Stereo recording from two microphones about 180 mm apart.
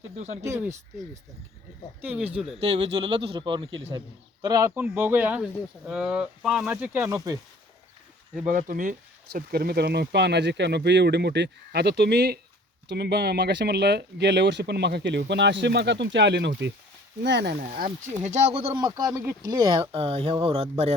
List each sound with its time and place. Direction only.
0.4 s speech: 15° right (ahead or behind)
2.6 s a man's voice: 35° right (ahead or behind)
4.4 s speech: 20° right (ahead or behind)
8.4 s speech: 45° right (ahead or behind); by 17.7 s 65° right (ahead or behind)
17.7 s a man's voice: 45° right (ahead or behind)
18.8 s speech: 20° right (ahead or behind)
19.8 s a man's voice: 30° right (ahead or behind)